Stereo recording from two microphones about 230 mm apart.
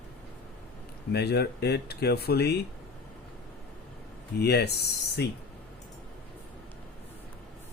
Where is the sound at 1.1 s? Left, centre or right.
Left.